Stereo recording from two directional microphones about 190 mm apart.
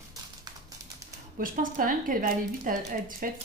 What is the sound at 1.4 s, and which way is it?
Speech, 45° right (ahead or behind).